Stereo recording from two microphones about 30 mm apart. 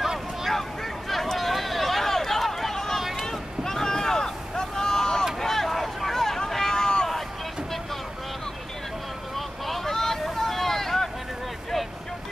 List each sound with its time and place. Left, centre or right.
0.5 s a sound: centre
2.7 s vehicle: centre
3.0 s boat: centre
3.3 s boat: centre
5.4 s vehicle: centre; by 7.1 s left
9.7 s boat: centre